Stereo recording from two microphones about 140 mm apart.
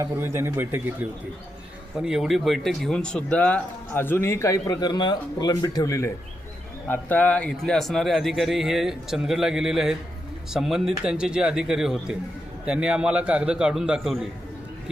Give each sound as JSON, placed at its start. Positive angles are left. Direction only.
{"t": 0.0, "sound": "a man's voice", "side_deg": -20}
{"t": 6.8, "sound": "a man's voice", "side_deg": 10}